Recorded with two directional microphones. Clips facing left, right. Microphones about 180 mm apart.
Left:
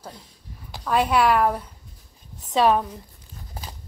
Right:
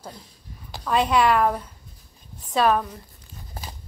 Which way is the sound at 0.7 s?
5° left (ahead or behind).